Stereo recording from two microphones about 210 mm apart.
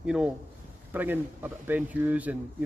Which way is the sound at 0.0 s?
5° right (ahead or behind).